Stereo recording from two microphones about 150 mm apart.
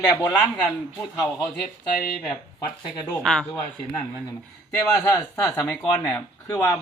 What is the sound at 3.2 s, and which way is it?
Speech, 5° left (ahead or behind).